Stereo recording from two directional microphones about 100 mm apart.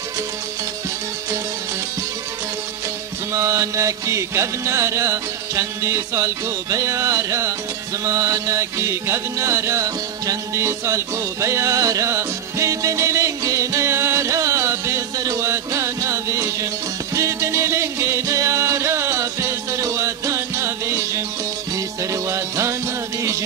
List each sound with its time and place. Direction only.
3.3 s music: 30° right (ahead or behind)